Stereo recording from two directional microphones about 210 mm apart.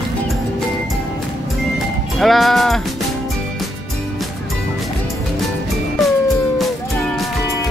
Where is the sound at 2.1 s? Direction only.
Centre (ahead or behind).